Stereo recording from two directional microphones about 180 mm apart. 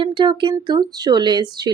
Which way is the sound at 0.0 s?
25° right (ahead or behind).